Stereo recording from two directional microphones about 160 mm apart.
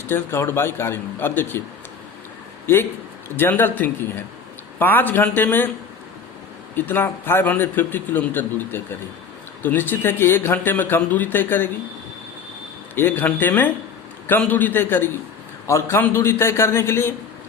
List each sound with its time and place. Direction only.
0.1 s a man's voice: 15° left (ahead or behind)
2.7 s a man's voice: 15° left (ahead or behind)
6.7 s a man's voice: 10° left (ahead or behind)
13.0 s a man's voice: 10° left (ahead or behind)